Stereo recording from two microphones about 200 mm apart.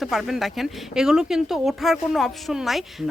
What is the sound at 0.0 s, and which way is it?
Speech, centre (ahead or behind).